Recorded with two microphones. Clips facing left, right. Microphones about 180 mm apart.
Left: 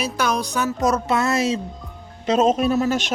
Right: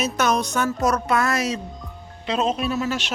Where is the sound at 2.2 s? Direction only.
45° left (ahead or behind).